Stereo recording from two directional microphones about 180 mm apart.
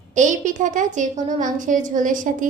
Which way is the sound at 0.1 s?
45° right (ahead or behind).